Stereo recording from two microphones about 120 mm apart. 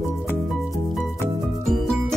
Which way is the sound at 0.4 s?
Centre (ahead or behind).